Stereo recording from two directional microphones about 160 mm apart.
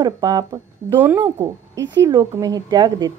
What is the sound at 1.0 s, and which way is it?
A woman's voice, 10° right (ahead or behind).